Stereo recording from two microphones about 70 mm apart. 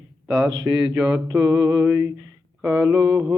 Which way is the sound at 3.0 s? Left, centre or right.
Right.